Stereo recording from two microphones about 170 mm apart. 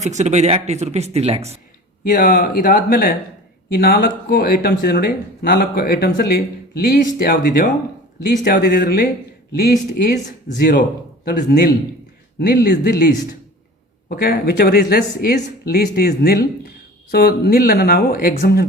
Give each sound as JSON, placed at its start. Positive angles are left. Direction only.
{"t": 0.0, "sound": "speech", "side_deg": -40}
{"t": 2.0, "sound": "speech", "side_deg": 55}
{"t": 8.2, "sound": "speech", "side_deg": 80}
{"t": 8.8, "sound": "speech", "side_deg": 50}
{"t": 9.5, "sound": "speech", "side_deg": 70}
{"t": 14.2, "sound": "speech", "side_deg": 70}